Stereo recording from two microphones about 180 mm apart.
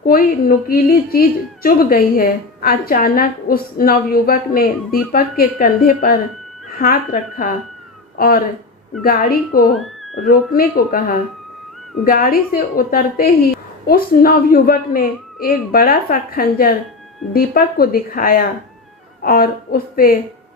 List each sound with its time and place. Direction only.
0.0 s a woman's voice: 55° left (ahead or behind)